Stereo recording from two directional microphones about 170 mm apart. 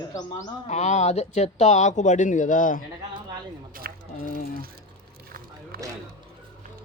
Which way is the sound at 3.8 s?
55° right (ahead or behind).